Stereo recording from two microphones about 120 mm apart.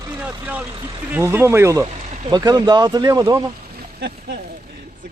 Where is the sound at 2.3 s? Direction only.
35° right (ahead or behind).